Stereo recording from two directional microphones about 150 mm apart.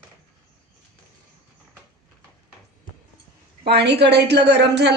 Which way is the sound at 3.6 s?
90° right.